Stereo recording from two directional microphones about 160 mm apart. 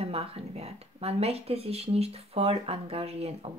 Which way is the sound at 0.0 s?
40° right (ahead or behind).